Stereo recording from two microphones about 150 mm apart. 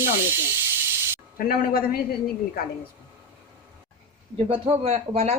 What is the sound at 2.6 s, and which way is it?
Speech, 90° left.